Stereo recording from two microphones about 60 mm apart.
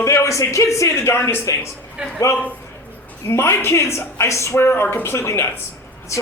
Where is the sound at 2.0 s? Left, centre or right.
Centre.